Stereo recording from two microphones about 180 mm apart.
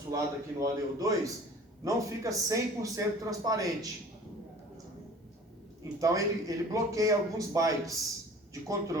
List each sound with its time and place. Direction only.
0.1 s a man's voice: 20° right (ahead or behind)
6.0 s a man's voice: 20° right (ahead or behind)